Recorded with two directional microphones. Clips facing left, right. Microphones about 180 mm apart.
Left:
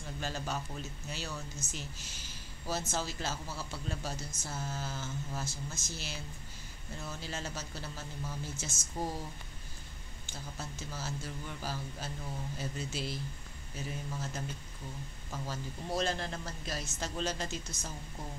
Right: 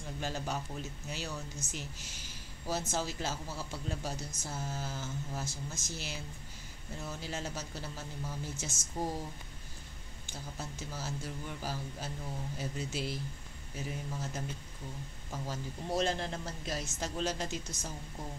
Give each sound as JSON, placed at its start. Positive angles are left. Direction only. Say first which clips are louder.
{"t": 0.2, "sound": "speech", "louder": "right 1 dB", "side_deg": -15}
{"t": 10.3, "sound": "speech", "louder": "right 1 dB", "side_deg": -15}